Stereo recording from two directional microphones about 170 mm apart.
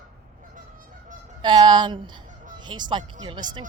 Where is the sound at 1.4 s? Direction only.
25° right (ahead or behind).